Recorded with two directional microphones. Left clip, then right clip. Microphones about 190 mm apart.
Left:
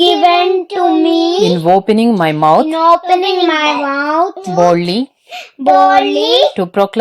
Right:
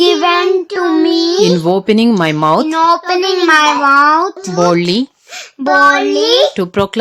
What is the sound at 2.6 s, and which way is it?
Speech, 40° right (ahead or behind).